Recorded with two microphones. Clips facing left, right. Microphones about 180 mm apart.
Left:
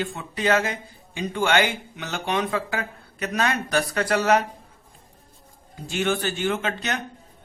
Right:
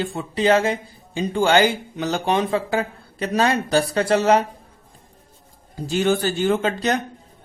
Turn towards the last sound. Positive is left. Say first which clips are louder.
# right 7 dB
turn(degrees=-35)  # may be behind; listen again after turning